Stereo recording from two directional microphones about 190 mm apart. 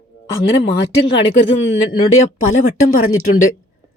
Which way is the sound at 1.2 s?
75° left (ahead or behind).